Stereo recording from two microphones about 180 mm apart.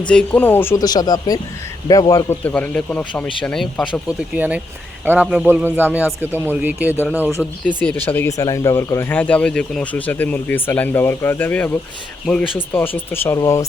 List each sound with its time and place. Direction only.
0.1 s a man's voice: 5° left (ahead or behind)
2.4 s speech: 10° left (ahead or behind)
4.4 s speech: 5° right (ahead or behind)
7.8 s speech: 10° left (ahead or behind)
13.1 s speech: 15° left (ahead or behind)